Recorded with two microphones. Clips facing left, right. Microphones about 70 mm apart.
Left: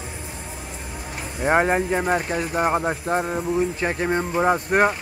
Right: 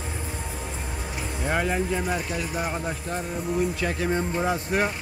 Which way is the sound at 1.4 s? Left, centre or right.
Left.